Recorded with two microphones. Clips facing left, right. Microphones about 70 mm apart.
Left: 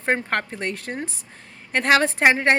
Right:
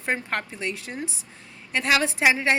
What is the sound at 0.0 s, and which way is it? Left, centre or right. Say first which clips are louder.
A woman's voice: left 4 dB; left.